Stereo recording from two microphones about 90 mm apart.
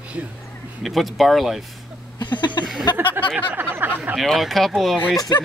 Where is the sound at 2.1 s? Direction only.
55° left (ahead or behind).